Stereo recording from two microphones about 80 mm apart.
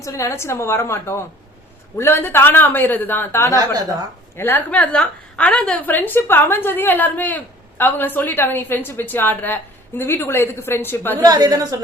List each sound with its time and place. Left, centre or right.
0.0 s a woman's voice: left
11.2 s a woman's voice: right